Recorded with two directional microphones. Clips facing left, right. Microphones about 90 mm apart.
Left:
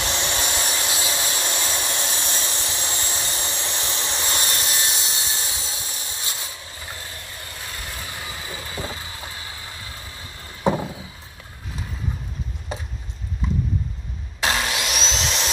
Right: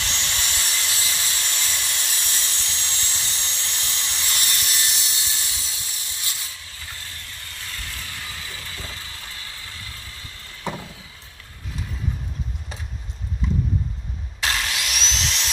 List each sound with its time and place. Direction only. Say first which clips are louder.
0.0 s hair dryer: left 5 dB; 20° left (ahead or behind)
7.5 s vehicle: left 1 dB; 20° left (ahead or behind)
10.6 s a sound: left 9 dB; 25° left (ahead or behind)
14.4 s wood: left 3 dB; 25° left (ahead or behind)